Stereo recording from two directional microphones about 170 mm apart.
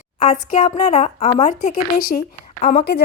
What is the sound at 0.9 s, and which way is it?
Speech, 40° left (ahead or behind).